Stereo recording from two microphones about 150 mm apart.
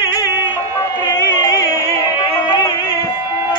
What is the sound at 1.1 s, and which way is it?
Music, 25° left (ahead or behind).